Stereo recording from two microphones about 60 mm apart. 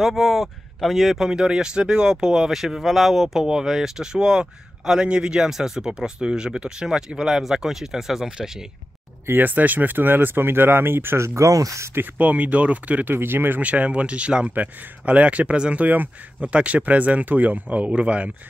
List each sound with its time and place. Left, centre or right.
0.0 s speech: centre
9.2 s speech: right
12.2 s speech: right
13.1 s speech: right
13.6 s speech: right